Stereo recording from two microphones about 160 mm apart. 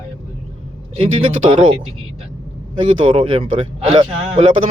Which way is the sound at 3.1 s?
35° right (ahead or behind).